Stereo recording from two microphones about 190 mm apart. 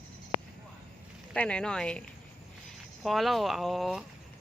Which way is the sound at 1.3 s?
5° left (ahead or behind).